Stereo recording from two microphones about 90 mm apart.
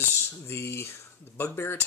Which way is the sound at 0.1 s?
30° left (ahead or behind).